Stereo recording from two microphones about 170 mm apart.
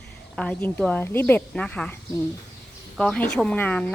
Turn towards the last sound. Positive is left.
turn(degrees=10)  # may be behind; listen again after turning